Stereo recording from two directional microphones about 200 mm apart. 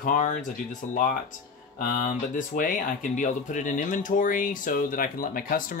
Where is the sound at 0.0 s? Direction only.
40° left (ahead or behind).